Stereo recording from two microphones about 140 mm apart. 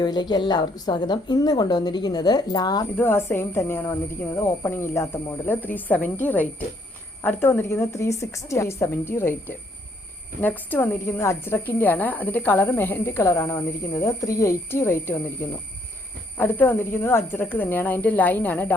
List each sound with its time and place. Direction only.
0.0 s a woman's voice: 30° left (ahead or behind)
2.9 s a woman's voice: 15° left (ahead or behind)